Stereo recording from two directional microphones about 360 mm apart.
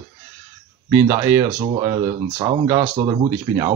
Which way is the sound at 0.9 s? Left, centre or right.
Centre.